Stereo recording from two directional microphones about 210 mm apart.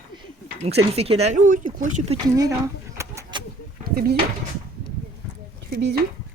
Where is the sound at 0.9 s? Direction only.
30° right (ahead or behind).